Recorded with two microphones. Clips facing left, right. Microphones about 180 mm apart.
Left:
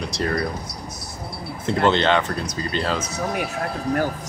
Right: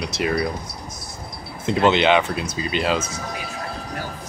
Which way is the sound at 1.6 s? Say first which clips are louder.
Right 2 dB; 15° right (ahead or behind).